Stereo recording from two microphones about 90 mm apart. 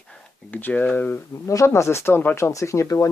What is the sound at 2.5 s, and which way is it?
Speech, 35° left (ahead or behind).